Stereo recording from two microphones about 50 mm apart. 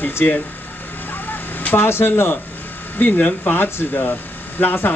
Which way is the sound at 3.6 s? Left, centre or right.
Left.